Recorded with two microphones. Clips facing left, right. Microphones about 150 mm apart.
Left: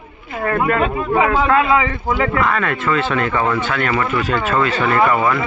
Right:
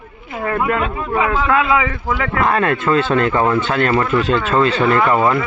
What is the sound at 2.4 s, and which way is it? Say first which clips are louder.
A man's voice: right 3 dB; 40° right (ahead or behind).